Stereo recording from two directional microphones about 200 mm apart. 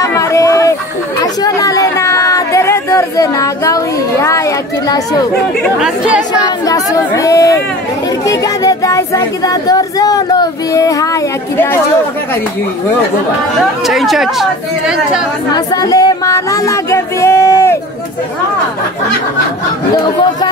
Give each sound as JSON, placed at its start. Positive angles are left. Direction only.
{"t": 0.0, "sound": "a sound", "side_deg": 15}
{"t": 5.6, "sound": "speech", "side_deg": 0}
{"t": 6.6, "sound": "speech", "side_deg": 15}
{"t": 13.8, "sound": "speech", "side_deg": 0}
{"t": 15.5, "sound": "speech", "side_deg": 20}